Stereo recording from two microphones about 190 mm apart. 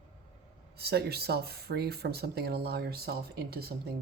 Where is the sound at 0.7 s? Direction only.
55° right (ahead or behind).